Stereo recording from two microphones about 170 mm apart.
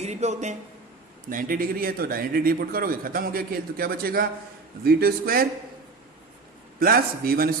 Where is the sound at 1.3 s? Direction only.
55° right (ahead or behind).